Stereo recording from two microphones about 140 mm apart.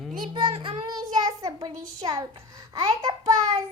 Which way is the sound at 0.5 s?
50° right (ahead or behind).